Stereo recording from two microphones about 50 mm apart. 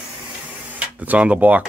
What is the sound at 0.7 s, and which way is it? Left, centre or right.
Speech, right.